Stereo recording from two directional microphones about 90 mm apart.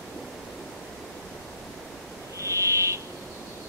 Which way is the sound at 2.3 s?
35° right (ahead or behind).